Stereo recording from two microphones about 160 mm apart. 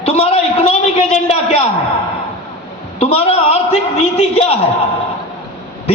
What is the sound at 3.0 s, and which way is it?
A man's voice, 40° left (ahead or behind).